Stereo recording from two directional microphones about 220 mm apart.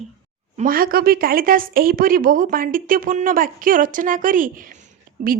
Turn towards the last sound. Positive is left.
turn(degrees=-35)  # may be behind; listen again after turning